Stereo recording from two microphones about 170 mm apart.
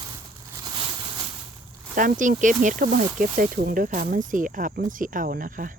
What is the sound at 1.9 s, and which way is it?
Speech, 50° right (ahead or behind).